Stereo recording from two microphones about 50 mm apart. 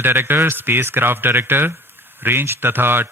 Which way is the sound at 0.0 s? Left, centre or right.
Right.